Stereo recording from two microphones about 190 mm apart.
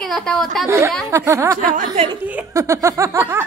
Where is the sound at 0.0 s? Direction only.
5° left (ahead or behind).